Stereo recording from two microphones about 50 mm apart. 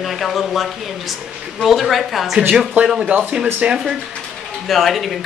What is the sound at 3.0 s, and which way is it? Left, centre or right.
Speech, right.